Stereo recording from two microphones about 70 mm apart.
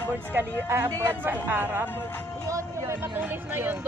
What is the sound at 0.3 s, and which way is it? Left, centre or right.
Speech, right.